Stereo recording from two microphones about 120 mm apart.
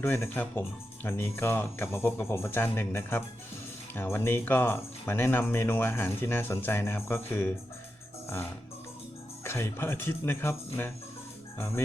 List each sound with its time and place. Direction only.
0.0 s speech: 20° left (ahead or behind)
9.4 s speech: 20° left (ahead or behind)
11.5 s music: 20° left (ahead or behind)